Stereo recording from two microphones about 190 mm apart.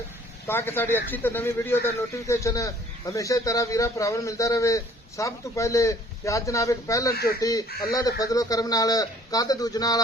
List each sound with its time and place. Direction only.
0.4 s speech: 10° left (ahead or behind)
7.7 s speech: 50° left (ahead or behind)
8.2 s a man's voice: 20° left (ahead or behind)